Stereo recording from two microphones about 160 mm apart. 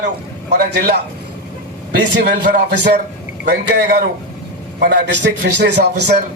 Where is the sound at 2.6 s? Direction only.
90° right.